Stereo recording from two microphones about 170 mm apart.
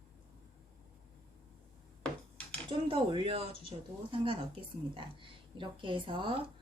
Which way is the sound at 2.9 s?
30° right (ahead or behind).